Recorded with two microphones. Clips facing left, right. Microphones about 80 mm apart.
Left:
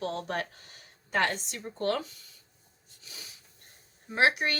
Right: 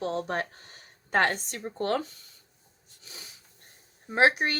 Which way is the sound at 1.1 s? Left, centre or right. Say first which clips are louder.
Right 3 dB; right.